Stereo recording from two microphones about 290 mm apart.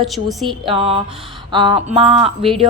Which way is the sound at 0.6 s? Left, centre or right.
Centre.